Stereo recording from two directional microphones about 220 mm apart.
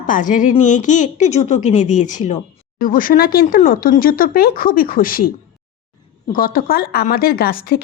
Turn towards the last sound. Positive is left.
turn(degrees=45)  # may be behind; listen again after turning